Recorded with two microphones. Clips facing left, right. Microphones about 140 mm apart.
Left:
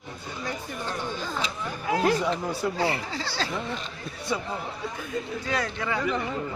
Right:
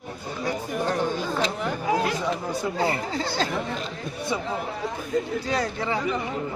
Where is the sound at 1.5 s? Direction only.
65° right (ahead or behind).